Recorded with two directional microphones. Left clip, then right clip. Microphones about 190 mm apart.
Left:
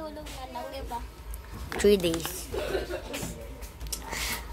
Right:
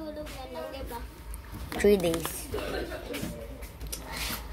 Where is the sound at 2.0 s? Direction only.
20° right (ahead or behind).